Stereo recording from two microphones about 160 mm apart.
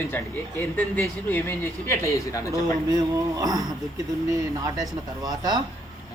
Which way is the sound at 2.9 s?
20° right (ahead or behind).